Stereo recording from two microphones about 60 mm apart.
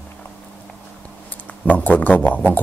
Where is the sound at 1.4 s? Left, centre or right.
Left.